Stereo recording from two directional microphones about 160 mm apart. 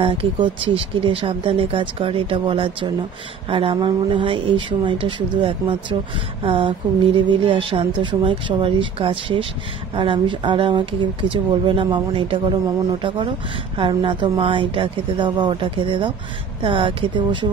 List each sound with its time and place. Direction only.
0.0 s speech: 30° right (ahead or behind)
13.7 s speech: 30° right (ahead or behind)